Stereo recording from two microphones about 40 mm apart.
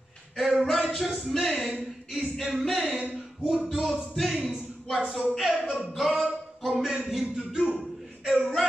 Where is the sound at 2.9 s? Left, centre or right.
Right.